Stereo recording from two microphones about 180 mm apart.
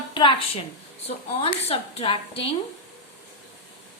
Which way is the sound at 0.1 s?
25° left (ahead or behind).